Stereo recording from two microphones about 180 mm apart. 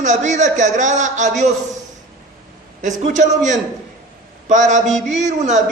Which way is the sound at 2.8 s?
45° right (ahead or behind).